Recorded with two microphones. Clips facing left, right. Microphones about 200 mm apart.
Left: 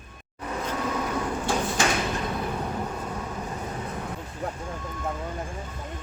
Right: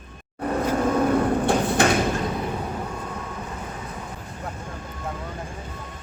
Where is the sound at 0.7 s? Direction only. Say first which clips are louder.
Right 9 dB; 55° right (ahead or behind).